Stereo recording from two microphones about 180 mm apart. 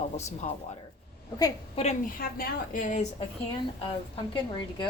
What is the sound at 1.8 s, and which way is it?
Speech, 35° left (ahead or behind).